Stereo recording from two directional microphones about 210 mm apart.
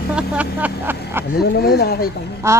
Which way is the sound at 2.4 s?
10° right (ahead or behind).